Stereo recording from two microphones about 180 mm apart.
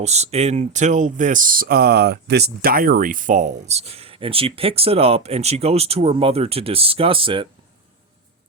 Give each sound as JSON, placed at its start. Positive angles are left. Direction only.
{"t": 0.0, "sound": "speech", "side_deg": -35}